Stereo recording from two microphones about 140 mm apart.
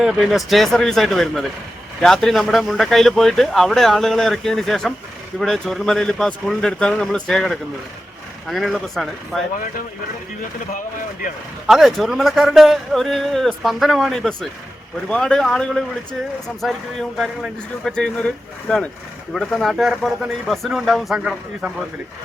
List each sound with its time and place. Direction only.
0.0 s speech: centre (ahead or behind)
11.6 s speech: centre (ahead or behind)